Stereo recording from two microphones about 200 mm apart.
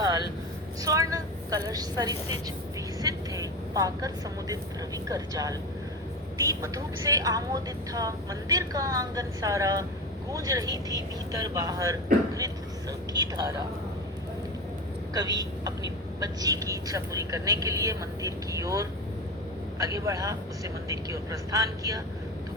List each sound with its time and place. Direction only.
0.8 s vehicle: 15° right (ahead or behind)
3.0 s speech: 15° right (ahead or behind)
13.1 s speech: 20° right (ahead or behind)
15.1 s a woman's voice: 20° right (ahead or behind)